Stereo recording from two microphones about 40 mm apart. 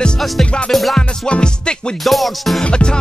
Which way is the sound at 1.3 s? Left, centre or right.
Left.